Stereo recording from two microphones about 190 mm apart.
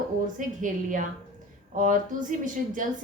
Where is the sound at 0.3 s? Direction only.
45° right (ahead or behind).